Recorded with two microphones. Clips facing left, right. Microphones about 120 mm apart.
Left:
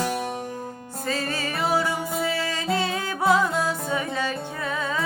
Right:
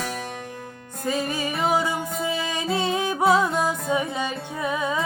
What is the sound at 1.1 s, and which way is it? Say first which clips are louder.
Music: right 2 dB; 15° right (ahead or behind).